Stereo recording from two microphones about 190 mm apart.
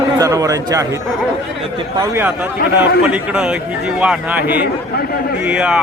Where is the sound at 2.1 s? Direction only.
10° right (ahead or behind).